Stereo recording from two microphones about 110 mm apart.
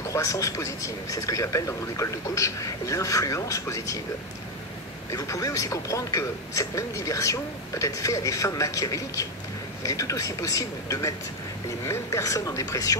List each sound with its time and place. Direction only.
0.1 s speech: 30° left (ahead or behind)
5.1 s speech: 30° left (ahead or behind)